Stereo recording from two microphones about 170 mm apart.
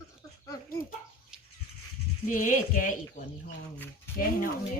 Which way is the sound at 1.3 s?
5° right (ahead or behind).